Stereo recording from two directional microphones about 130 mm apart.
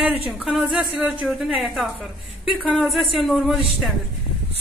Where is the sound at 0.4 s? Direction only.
5° right (ahead or behind).